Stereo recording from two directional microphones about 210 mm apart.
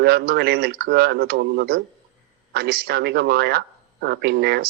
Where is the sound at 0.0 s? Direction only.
50° right (ahead or behind).